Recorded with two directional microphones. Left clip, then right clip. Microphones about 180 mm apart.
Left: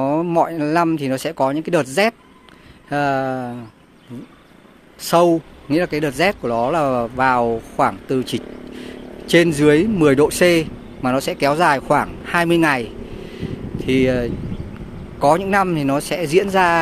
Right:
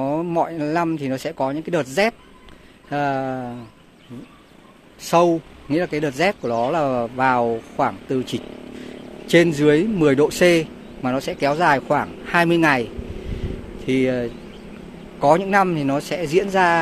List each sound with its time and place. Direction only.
0.0 s speech: 20° left (ahead or behind)
5.0 s speech: 30° left (ahead or behind)
5.7 s speech: 15° left (ahead or behind)